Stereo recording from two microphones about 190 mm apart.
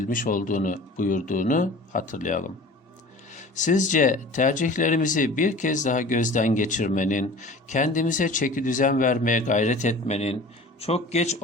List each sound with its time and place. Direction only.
0.1 s speech: 45° left (ahead or behind)